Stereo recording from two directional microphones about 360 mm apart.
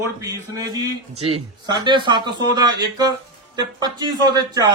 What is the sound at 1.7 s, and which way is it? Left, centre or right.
A man's voice, centre.